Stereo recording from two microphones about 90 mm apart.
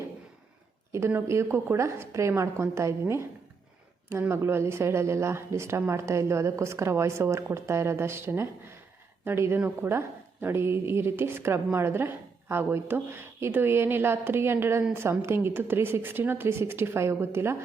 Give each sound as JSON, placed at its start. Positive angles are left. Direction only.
{"t": 0.9, "sound": "a woman's voice", "side_deg": -25}